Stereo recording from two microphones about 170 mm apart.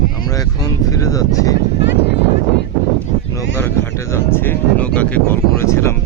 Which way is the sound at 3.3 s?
15° left (ahead or behind).